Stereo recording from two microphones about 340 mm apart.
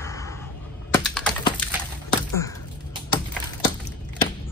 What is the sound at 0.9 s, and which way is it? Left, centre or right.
Typing, centre.